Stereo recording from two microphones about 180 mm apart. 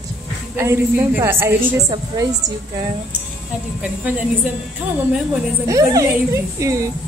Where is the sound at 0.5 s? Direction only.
15° right (ahead or behind).